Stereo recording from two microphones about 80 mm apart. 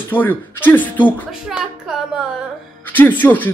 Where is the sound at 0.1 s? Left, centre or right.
Left.